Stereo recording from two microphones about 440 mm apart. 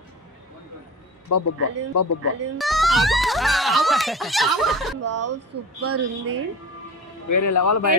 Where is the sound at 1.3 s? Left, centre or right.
Left.